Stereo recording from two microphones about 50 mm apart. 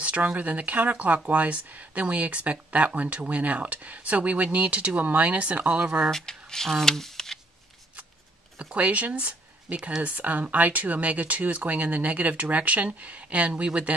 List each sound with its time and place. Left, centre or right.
0.0 s speech: right
6.0 s speech: centre
8.7 s speech: right